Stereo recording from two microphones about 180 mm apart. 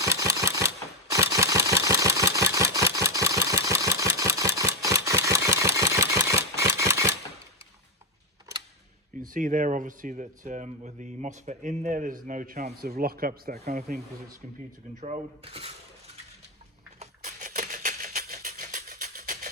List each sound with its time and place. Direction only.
0.0 s camera: 20° right (ahead or behind)
1.1 s engine: 20° right (ahead or behind)
9.2 s speech: 45° right (ahead or behind)
15.0 s speech: 35° right (ahead or behind)
17.0 s music: 45° right (ahead or behind)